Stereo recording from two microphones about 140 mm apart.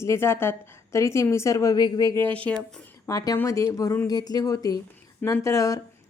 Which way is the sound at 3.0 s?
25° left (ahead or behind).